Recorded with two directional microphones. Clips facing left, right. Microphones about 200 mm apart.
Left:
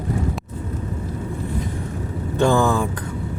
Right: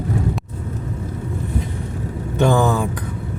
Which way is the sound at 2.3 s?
20° right (ahead or behind).